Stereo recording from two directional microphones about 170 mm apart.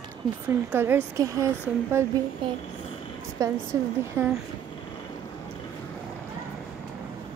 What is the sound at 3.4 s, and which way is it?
Speech, 20° right (ahead or behind).